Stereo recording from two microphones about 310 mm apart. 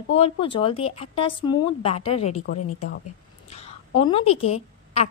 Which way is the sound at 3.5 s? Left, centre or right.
Centre.